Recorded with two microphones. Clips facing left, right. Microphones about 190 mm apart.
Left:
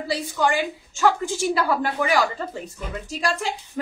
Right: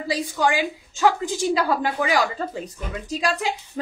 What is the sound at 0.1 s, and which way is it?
A woman's voice, 15° right (ahead or behind).